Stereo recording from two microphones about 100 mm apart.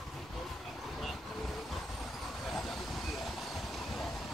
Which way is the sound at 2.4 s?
Centre (ahead or behind).